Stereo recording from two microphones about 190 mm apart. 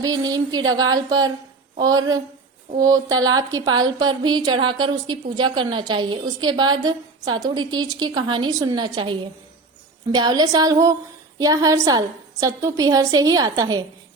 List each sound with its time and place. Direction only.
0.0 s a woman's voice: 20° right (ahead or behind)